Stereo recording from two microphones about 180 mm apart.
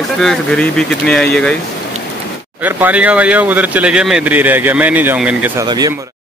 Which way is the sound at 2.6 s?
10° right (ahead or behind).